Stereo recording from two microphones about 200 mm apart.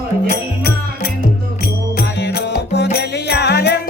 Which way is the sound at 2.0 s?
50° left (ahead or behind).